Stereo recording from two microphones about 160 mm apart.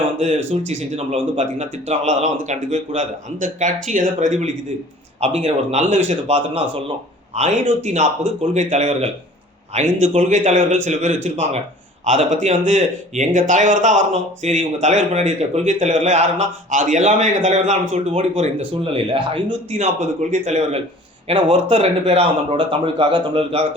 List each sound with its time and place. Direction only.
0.3 s speech: 35° right (ahead or behind); by 14.0 s 50° right (ahead or behind)
14.1 s speech: 40° right (ahead or behind)